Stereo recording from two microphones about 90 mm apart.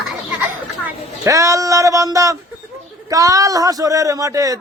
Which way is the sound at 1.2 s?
35° right (ahead or behind).